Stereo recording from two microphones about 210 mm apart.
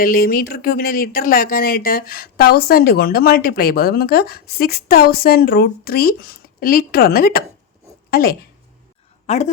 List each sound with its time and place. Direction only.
0.0 s speech: 45° left (ahead or behind)
9.2 s a woman's voice: 35° left (ahead or behind)